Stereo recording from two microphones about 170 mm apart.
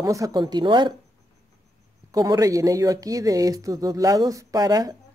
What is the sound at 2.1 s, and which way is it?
Speech, 20° right (ahead or behind).